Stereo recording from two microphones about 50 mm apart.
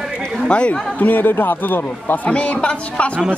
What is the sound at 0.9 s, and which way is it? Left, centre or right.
Speech, left.